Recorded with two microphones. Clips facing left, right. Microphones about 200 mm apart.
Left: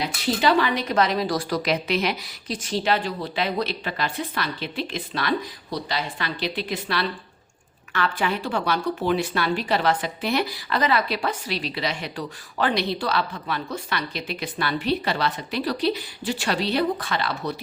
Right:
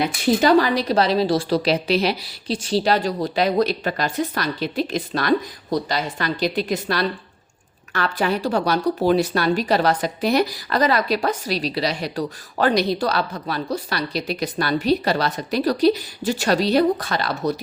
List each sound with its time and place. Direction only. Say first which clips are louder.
0.4 s a woman's voice: right 4 dB; 40° right (ahead or behind)